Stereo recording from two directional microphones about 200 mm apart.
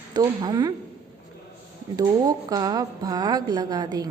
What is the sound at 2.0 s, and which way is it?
A woman's voice, 20° right (ahead or behind).